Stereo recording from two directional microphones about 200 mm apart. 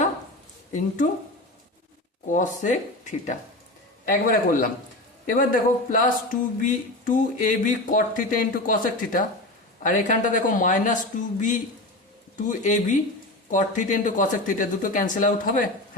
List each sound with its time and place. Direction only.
2.3 s speech: 40° left (ahead or behind)